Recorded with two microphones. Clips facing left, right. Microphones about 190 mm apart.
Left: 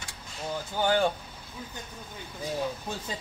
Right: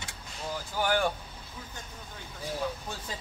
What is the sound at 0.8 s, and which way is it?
Speech, 25° left (ahead or behind).